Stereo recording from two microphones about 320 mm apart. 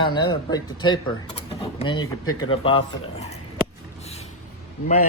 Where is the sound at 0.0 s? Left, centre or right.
Centre.